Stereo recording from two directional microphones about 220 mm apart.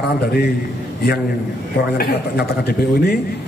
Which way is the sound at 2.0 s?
45° left (ahead or behind).